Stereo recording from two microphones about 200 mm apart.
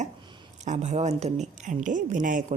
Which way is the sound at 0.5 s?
35° right (ahead or behind).